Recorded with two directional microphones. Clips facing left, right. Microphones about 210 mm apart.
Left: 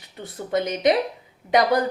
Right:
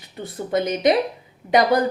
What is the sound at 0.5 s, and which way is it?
Speech, 35° right (ahead or behind).